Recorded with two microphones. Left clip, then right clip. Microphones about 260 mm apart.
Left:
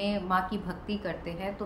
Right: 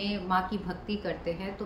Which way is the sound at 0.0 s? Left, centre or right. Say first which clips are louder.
Left 1 dB; centre.